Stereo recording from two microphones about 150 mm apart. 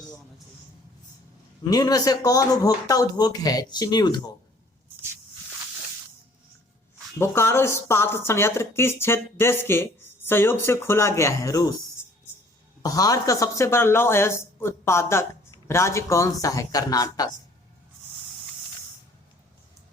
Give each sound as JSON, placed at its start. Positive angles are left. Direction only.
{"t": 1.7, "sound": "speech", "side_deg": 25}
{"t": 7.2, "sound": "speech", "side_deg": 15}
{"t": 12.8, "sound": "speech", "side_deg": 25}